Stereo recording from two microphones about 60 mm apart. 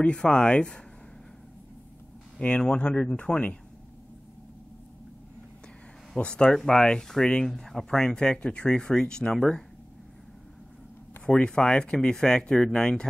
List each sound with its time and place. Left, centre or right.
0.0 s speech: centre
2.3 s speech: centre
6.1 s speech: centre
11.2 s speech: centre